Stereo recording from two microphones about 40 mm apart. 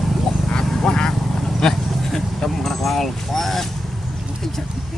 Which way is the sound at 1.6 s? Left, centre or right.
Centre.